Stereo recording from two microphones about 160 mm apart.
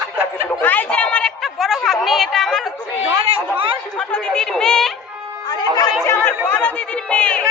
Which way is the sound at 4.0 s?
5° left (ahead or behind).